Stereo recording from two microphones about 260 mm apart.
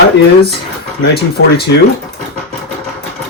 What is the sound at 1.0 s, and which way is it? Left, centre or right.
Speech, left.